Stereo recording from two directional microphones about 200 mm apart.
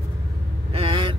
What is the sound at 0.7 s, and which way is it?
Vehicle, 25° right (ahead or behind).